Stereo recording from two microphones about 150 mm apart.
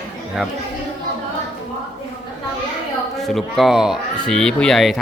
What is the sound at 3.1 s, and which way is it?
Speech, centre (ahead or behind).